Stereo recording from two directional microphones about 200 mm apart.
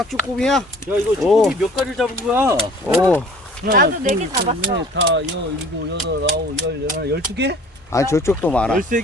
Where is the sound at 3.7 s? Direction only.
45° right (ahead or behind).